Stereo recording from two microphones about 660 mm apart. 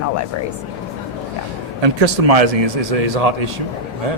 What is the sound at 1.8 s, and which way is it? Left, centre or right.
A man's voice, right.